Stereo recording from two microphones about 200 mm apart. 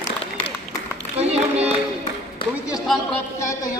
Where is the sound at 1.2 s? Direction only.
30° right (ahead or behind).